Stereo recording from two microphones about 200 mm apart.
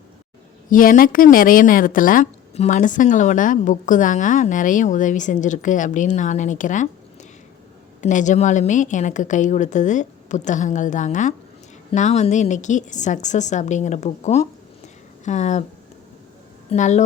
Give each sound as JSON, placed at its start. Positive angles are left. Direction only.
{"t": 0.7, "sound": "a woman's voice", "side_deg": 45}
{"t": 8.0, "sound": "a woman's voice", "side_deg": 40}
{"t": 16.6, "sound": "a woman's voice", "side_deg": 35}